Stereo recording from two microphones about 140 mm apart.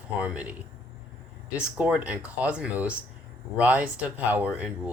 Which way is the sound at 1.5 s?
10° right (ahead or behind).